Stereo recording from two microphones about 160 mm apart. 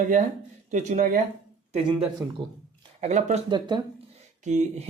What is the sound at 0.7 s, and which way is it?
Speech, 50° right (ahead or behind).